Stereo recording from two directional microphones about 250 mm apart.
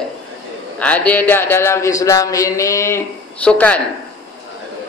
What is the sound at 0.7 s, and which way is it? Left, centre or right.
Speech, centre.